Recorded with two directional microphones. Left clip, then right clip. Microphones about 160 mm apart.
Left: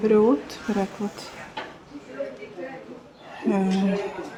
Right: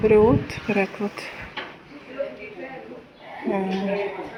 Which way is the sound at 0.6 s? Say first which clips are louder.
Right 6 dB; 15° left (ahead or behind).